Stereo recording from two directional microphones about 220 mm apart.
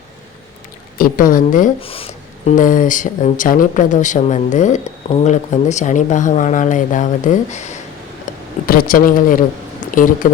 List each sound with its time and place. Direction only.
0.9 s speech: 40° left (ahead or behind)
1.8 s speech: 25° left (ahead or behind)
2.5 s speech: 35° left (ahead or behind)